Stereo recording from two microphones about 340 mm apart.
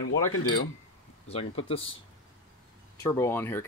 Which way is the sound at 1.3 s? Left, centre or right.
Centre.